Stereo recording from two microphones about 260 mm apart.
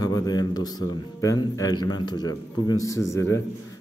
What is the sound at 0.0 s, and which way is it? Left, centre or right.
A man's voice, centre.